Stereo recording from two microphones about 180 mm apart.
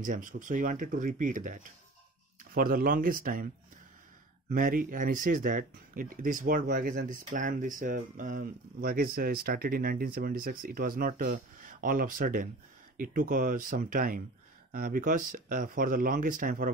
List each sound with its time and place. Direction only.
0.0 s speech: 45° right (ahead or behind)
4.5 s speech: 50° right (ahead or behind)